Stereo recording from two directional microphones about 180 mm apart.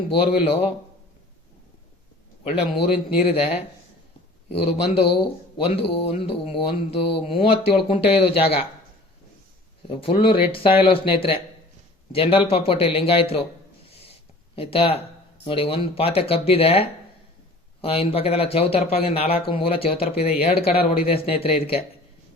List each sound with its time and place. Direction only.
0.4 s speech: 35° left (ahead or behind)
2.4 s speech: 35° left (ahead or behind)
4.4 s speech: 30° left (ahead or behind)
9.8 s speech: 30° left (ahead or behind)
14.5 s speech: 30° left (ahead or behind)